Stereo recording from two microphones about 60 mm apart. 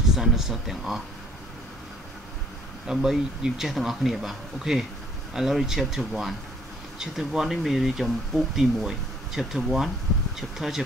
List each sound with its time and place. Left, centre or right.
0.1 s speech: centre
2.9 s speech: centre